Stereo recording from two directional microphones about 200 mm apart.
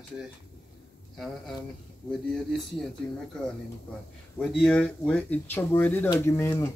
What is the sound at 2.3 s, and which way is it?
Speech, centre (ahead or behind).